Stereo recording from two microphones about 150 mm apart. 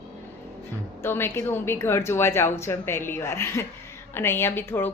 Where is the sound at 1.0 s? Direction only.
15° left (ahead or behind).